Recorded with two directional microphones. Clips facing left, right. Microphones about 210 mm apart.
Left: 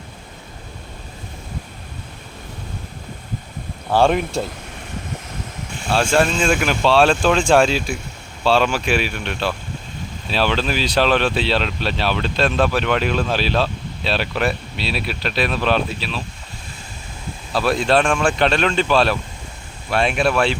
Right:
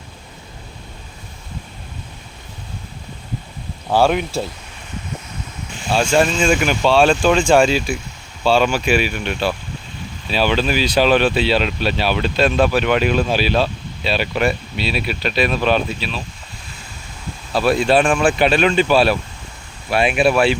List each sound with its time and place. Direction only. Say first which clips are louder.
3.9 s speech: even; centre (ahead or behind)
5.9 s speech: right 1 dB; centre (ahead or behind)
17.5 s speech: right 2 dB; centre (ahead or behind)